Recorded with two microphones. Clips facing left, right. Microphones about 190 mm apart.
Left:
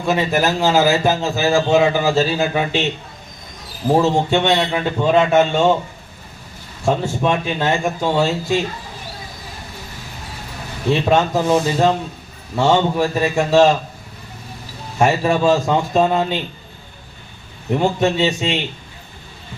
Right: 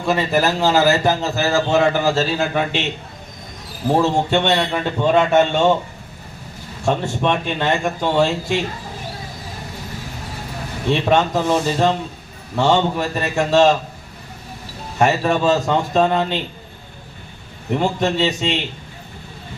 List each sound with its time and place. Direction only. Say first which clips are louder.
0.0 s a man's voice: even; centre (ahead or behind)
3.9 s a man's voice: left 1 dB; 5° left (ahead or behind)
6.8 s a man's voice: left 1 dB; 5° left (ahead or behind)
11.0 s a man's voice: even; 5° left (ahead or behind)
15.0 s a man's voice: left 1 dB; 10° left (ahead or behind)
17.7 s a man's voice: left 2 dB; 5° left (ahead or behind)